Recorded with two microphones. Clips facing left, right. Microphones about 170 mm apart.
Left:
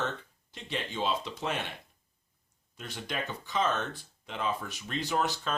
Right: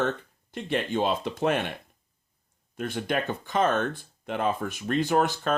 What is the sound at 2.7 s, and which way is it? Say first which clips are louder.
Speech: right 9 dB; 55° right (ahead or behind).